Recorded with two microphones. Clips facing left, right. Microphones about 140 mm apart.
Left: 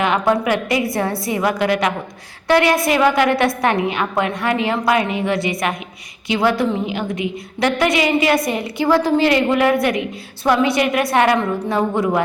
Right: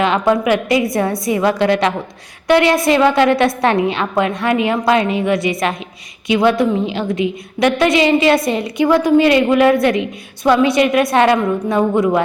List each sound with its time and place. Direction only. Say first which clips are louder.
0.0 s a woman's voice: right 3 dB; 20° right (ahead or behind)
5.4 s a woman's voice: right 3 dB; 25° left (ahead or behind)
6.4 s a woman's voice: right 3 dB; 20° right (ahead or behind)